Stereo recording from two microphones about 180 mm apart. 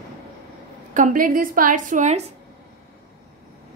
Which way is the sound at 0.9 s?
50° right (ahead or behind).